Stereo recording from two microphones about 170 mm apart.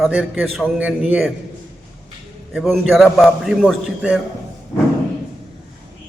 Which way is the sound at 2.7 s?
Centre (ahead or behind).